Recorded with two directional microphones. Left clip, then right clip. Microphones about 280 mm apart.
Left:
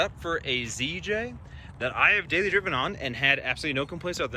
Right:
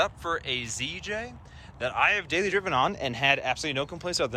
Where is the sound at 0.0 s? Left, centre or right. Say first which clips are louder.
Even; centre.